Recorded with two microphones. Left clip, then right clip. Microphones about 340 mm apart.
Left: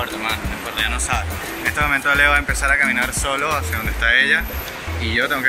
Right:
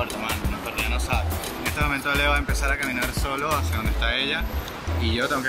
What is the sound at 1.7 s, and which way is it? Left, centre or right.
Speech, centre.